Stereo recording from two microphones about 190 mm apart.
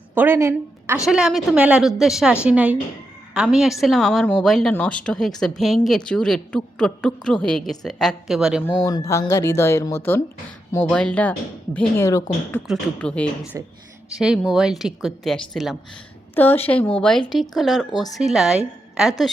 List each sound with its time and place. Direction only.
0.1 s a woman's voice: 10° right (ahead or behind)
1.0 s a woman's voice: centre (ahead or behind)
8.8 s speech: 15° left (ahead or behind)
12.6 s speech: centre (ahead or behind)
16.3 s speech: 10° left (ahead or behind)